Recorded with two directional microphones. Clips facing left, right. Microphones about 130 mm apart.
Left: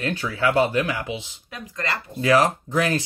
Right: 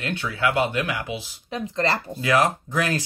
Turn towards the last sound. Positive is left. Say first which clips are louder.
# left 2 dB
turn(degrees=30)  # may be behind; listen again after turning